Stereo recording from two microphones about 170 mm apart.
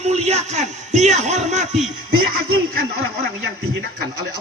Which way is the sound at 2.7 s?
60° right (ahead or behind).